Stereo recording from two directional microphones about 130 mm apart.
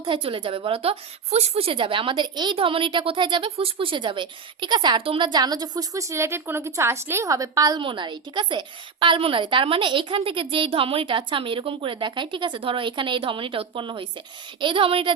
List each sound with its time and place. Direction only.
0.0 s a woman's voice: 40° right (ahead or behind); by 7.8 s 25° right (ahead or behind)
7.8 s a woman's voice: 40° right (ahead or behind)